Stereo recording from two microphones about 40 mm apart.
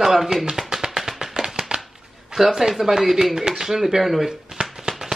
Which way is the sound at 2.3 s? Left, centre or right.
Centre.